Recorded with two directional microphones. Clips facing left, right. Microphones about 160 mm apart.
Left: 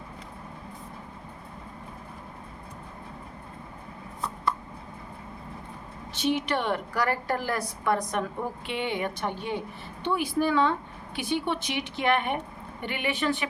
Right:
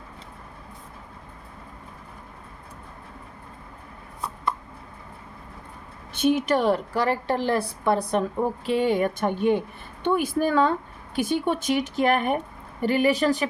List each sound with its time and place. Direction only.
6.1 s a woman's voice: 50° right (ahead or behind)